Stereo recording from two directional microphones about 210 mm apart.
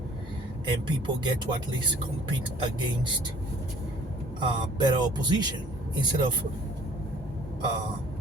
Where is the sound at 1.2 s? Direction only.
20° right (ahead or behind).